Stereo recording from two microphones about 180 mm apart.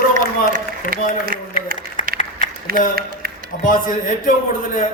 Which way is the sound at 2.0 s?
45° left (ahead or behind).